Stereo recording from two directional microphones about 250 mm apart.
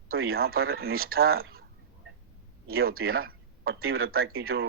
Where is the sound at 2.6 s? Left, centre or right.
Right.